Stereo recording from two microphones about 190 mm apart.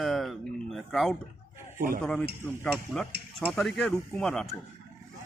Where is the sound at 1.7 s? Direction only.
45° right (ahead or behind).